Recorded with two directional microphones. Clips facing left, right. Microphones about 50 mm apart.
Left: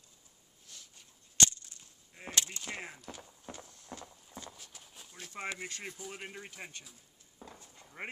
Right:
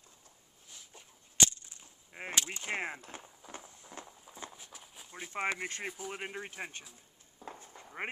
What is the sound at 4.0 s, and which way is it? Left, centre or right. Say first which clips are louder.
Clip-clop: right 2 dB; right.